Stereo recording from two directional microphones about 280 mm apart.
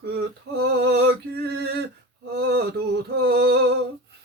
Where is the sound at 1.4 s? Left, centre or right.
Right.